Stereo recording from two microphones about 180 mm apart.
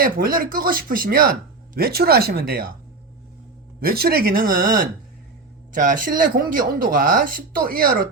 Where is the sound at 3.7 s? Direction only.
55° right (ahead or behind).